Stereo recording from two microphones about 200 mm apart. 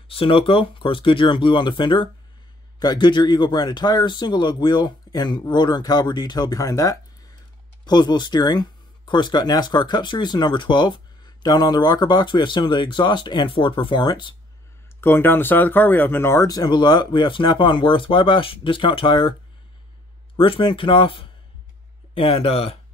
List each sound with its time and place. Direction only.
0.1 s speech: 25° left (ahead or behind)
15.0 s speech: 10° left (ahead or behind)
20.3 s speech: 25° left (ahead or behind)